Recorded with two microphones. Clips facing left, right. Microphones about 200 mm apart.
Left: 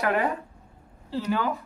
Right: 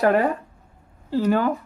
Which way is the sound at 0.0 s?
40° right (ahead or behind).